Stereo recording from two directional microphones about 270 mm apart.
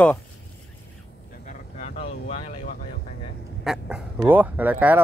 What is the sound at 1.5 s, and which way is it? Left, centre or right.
Vehicle, left.